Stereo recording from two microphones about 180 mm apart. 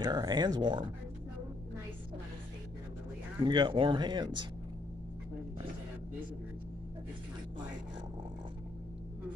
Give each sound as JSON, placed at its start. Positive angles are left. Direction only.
{"t": 0.0, "sound": "speech", "side_deg": -20}
{"t": 3.4, "sound": "speech", "side_deg": -25}